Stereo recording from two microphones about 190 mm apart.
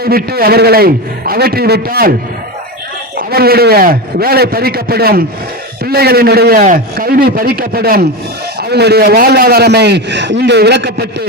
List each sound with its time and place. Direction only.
0.0 s a man's voice: 55° right (ahead or behind)
3.2 s a man's voice: 55° right (ahead or behind)